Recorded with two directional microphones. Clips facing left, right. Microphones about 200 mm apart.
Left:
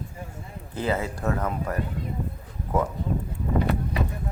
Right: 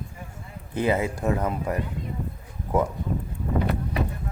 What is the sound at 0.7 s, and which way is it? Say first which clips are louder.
Speech: right 3 dB; 15° right (ahead or behind).